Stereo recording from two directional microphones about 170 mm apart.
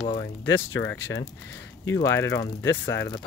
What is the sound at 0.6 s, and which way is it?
Speech, 90° left.